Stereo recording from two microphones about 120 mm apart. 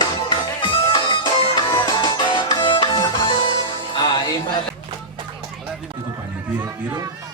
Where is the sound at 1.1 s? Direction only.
45° left (ahead or behind).